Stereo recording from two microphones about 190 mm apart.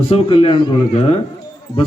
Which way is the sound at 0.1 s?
30° left (ahead or behind).